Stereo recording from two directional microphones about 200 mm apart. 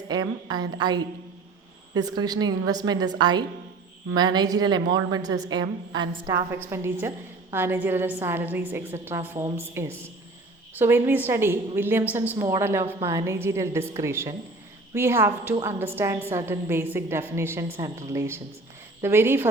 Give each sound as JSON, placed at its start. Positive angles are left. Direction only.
{"t": 0.1, "sound": "a woman's voice", "side_deg": -20}